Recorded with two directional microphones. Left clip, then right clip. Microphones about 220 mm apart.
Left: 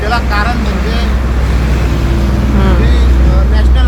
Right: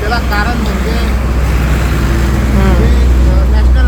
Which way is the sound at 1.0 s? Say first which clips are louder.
Even; 45° right (ahead or behind).